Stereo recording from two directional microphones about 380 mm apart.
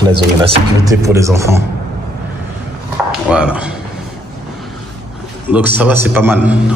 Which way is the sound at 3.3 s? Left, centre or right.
Centre.